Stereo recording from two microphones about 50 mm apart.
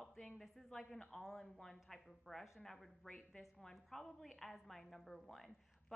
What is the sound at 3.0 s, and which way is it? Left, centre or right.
A man's voice, centre.